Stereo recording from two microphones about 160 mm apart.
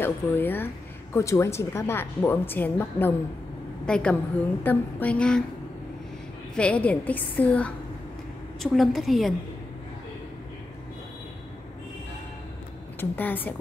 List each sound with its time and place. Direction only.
0.0 s a woman's voice: 15° left (ahead or behind)
6.5 s a woman's voice: 5° left (ahead or behind)
13.0 s a woman's voice: 10° left (ahead or behind)